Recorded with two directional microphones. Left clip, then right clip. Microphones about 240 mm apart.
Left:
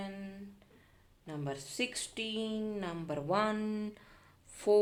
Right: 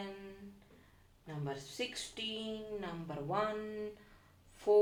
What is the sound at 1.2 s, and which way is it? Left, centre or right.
Speech, left.